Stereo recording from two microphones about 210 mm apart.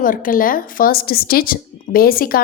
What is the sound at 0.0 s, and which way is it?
Speech, 40° left (ahead or behind).